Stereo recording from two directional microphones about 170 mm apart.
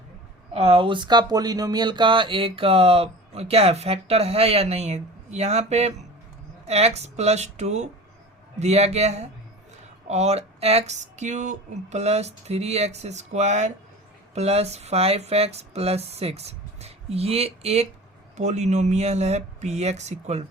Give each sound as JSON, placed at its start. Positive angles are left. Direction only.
{"t": 0.5, "sound": "speech", "side_deg": -35}